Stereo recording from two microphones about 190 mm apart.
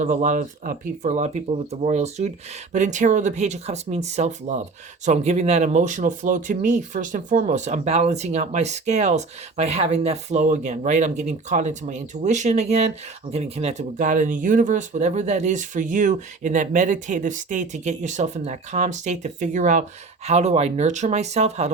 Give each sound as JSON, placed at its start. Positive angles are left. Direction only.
{"t": 0.0, "sound": "speech", "side_deg": -40}